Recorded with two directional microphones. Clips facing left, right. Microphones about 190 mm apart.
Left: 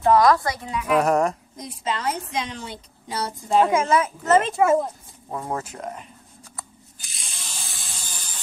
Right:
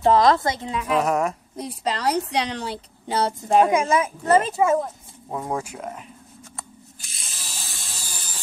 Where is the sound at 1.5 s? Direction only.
35° right (ahead or behind).